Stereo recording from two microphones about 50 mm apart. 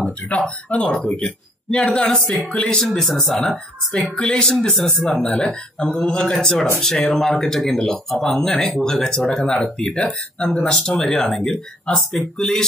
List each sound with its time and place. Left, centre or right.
0.7 s speech: centre
3.0 s speech: centre
4.2 s speech: centre